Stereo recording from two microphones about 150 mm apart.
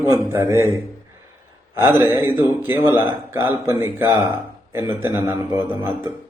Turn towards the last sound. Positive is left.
turn(degrees=-15)  # may be behind; listen again after turning